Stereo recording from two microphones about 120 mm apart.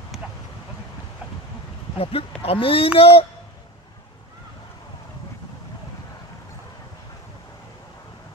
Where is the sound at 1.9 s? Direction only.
55° left (ahead or behind).